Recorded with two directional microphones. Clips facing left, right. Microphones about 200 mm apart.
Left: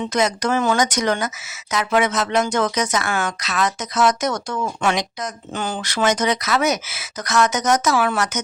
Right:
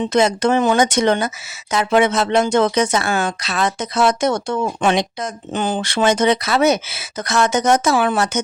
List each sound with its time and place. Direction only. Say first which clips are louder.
0.0 s speech: right 5 dB; 30° right (ahead or behind)